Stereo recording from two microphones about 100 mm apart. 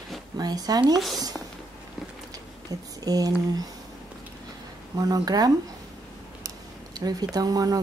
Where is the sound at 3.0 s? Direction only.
40° right (ahead or behind).